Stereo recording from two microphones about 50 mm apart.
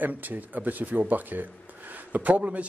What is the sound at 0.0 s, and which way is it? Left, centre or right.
A man's voice, right.